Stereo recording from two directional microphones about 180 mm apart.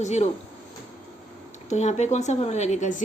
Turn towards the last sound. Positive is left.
turn(degrees=45)  # may be behind; listen again after turning